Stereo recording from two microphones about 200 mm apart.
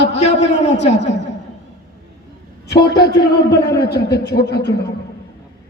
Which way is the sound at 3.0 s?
55° left (ahead or behind).